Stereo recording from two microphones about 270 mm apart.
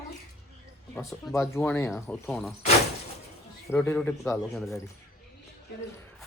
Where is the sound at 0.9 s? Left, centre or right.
Centre.